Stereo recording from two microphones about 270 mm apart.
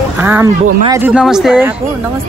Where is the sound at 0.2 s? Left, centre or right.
Centre.